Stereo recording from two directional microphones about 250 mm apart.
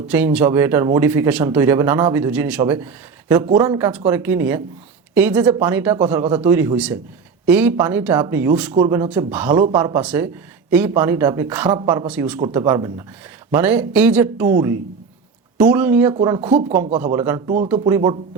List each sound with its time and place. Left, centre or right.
0.1 s speech: centre
12.4 s speech: centre
17.0 s speech: centre